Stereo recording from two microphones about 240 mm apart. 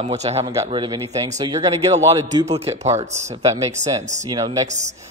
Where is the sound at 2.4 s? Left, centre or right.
Right.